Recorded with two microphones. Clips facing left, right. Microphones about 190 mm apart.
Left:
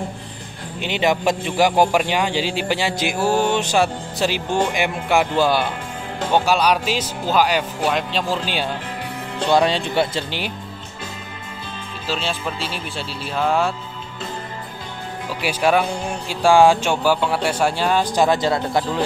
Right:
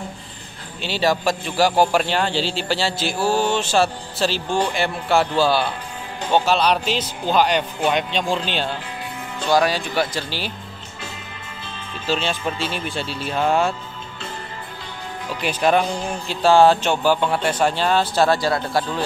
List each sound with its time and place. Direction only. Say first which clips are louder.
0.7 s a man's voice: left 1 dB; 20° left (ahead or behind)
9.5 s speech: left 1 dB; 25° left (ahead or behind)
12.1 s speech: right 2 dB; centre (ahead or behind)
15.4 s a man's voice: even; 10° left (ahead or behind)